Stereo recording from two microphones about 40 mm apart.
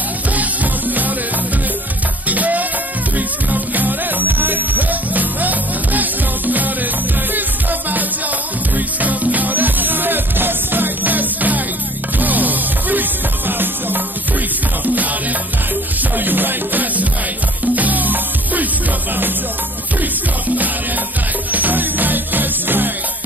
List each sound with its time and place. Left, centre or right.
0.4 s music: right
2.2 s music: right
8.7 s music: right
16.0 s music: right
21.5 s music: right